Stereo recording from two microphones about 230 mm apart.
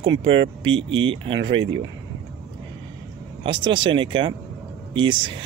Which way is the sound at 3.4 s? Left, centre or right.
Right.